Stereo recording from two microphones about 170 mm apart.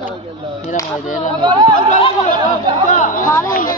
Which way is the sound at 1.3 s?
25° right (ahead or behind).